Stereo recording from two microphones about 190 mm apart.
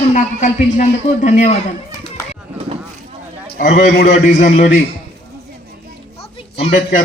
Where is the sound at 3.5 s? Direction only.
45° left (ahead or behind).